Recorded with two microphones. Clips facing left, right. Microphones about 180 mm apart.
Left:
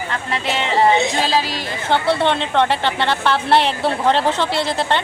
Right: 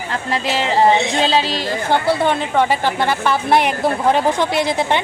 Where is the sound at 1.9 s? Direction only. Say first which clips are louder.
Even; 10° right (ahead or behind).